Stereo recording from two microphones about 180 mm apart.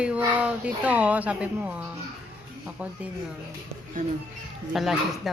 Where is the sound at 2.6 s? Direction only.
10° right (ahead or behind).